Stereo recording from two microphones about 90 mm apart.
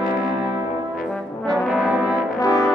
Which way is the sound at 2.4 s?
40° left (ahead or behind).